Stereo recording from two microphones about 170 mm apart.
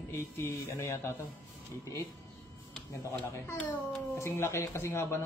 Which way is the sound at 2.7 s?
10° left (ahead or behind).